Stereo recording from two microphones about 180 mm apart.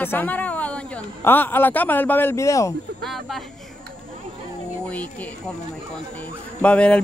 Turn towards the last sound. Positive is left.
turn(degrees=5)  # may be behind; listen again after turning